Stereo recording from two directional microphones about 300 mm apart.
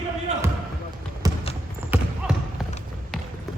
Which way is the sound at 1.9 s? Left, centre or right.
Centre.